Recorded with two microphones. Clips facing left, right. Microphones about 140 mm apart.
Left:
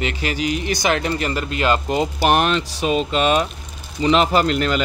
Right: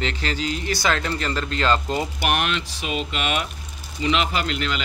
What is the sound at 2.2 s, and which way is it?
Speech, 35° left (ahead or behind).